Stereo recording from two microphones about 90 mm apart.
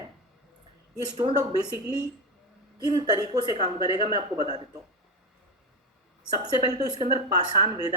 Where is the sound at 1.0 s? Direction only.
55° right (ahead or behind).